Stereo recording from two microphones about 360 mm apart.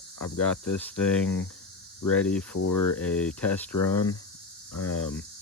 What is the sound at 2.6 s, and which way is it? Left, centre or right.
Speech, left.